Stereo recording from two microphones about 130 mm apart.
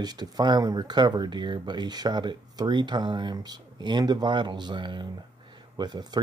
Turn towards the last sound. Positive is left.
turn(degrees=-35)  # may be behind; listen again after turning